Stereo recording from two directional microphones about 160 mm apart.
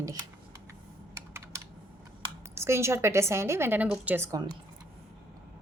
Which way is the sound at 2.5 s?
15° right (ahead or behind).